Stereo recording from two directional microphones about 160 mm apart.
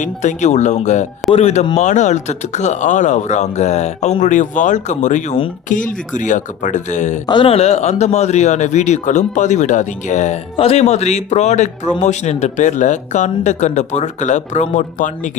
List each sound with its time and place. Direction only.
0.0 s speech: 50° left (ahead or behind)
7.3 s speech: 35° left (ahead or behind); by 15.3 s 50° left (ahead or behind)